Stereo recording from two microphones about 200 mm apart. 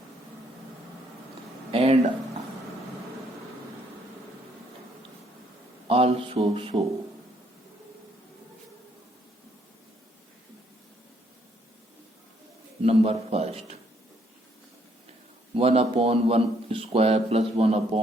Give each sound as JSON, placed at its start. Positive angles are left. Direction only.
{"t": 1.7, "sound": "a sound", "side_deg": -30}
{"t": 5.9, "sound": "a man's voice", "side_deg": -30}
{"t": 12.8, "sound": "a man's voice", "side_deg": -30}
{"t": 15.5, "sound": "a man's voice", "side_deg": -30}